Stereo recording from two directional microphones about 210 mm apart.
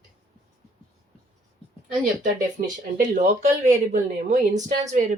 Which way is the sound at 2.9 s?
40° right (ahead or behind).